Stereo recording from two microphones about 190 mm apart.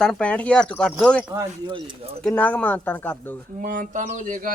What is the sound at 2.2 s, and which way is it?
Speech, 5° left (ahead or behind).